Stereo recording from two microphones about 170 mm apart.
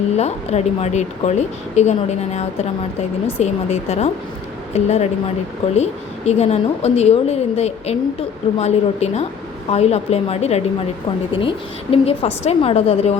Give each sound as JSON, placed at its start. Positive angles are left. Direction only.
{"t": 0.2, "sound": "speech", "side_deg": 40}